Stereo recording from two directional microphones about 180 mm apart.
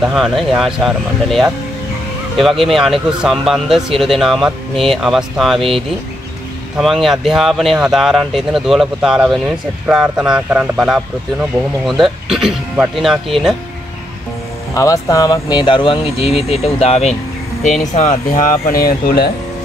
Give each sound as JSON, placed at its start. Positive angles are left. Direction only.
{"t": 0.0, "sound": "speech", "side_deg": 0}
{"t": 14.7, "sound": "speech", "side_deg": 20}